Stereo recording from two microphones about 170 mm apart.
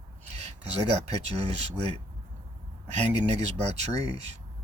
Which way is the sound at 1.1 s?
40° right (ahead or behind).